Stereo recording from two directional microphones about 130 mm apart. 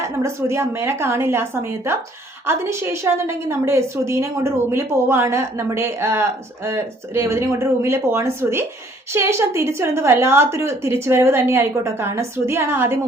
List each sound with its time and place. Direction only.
0.2 s a woman's voice: 20° right (ahead or behind)